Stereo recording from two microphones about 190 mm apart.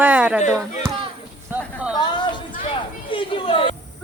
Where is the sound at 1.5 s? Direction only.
5° right (ahead or behind).